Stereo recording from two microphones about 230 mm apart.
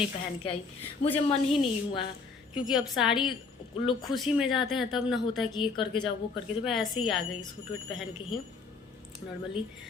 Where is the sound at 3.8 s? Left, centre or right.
Left.